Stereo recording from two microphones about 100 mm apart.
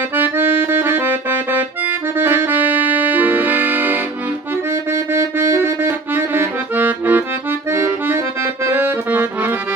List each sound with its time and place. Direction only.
0.2 s accordion: 20° right (ahead or behind)
2.1 s music: 20° right (ahead or behind)
5.1 s accordion: 25° right (ahead or behind)